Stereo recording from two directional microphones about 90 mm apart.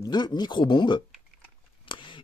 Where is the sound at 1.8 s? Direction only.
65° left (ahead or behind).